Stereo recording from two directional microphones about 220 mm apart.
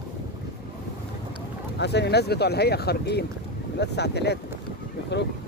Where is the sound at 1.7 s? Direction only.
50° left (ahead or behind).